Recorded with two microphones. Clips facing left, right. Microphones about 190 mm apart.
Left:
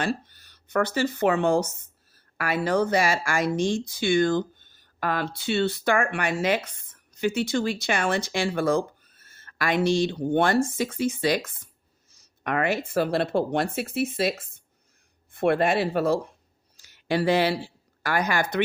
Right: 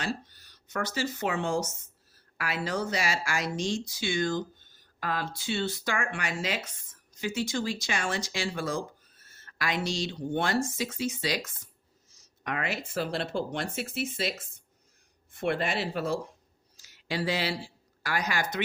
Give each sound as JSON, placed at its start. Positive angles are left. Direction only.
{"t": 0.0, "sound": "speech", "side_deg": 55}
{"t": 16.7, "sound": "a sound", "side_deg": 55}
{"t": 18.0, "sound": "speech", "side_deg": 55}